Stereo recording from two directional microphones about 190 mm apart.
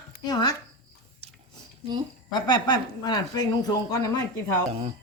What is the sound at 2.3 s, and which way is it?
Speech, 25° left (ahead or behind).